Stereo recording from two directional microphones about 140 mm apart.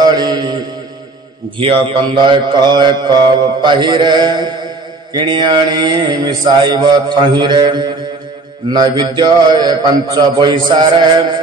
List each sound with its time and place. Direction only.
0.0 s mantra: 30° right (ahead or behind)
1.6 s mantra: 35° right (ahead or behind)